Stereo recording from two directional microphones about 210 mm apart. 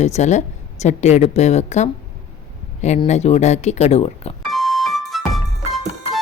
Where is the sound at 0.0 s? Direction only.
35° left (ahead or behind).